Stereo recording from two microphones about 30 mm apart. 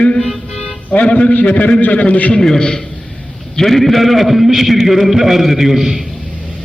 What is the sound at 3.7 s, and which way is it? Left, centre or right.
A man's voice, centre.